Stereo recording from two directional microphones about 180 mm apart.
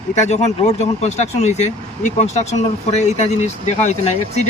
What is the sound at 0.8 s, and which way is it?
Speech, 40° left (ahead or behind).